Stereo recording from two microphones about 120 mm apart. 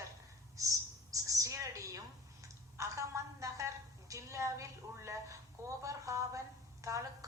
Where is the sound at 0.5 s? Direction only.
25° right (ahead or behind).